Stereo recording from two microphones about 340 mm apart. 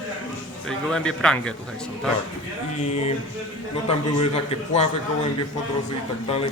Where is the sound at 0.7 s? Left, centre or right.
Centre.